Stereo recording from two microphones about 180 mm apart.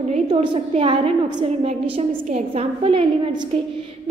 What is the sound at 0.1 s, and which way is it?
A woman's voice, 30° right (ahead or behind).